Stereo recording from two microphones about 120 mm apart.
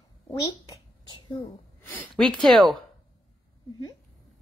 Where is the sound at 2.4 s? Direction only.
Centre (ahead or behind).